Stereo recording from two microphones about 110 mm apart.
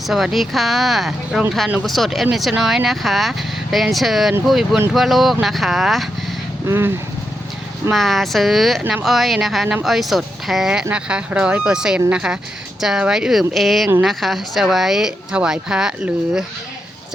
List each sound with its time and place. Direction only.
0.1 s speech: centre (ahead or behind)
6.7 s speech: 20° right (ahead or behind)
7.9 s speech: centre (ahead or behind)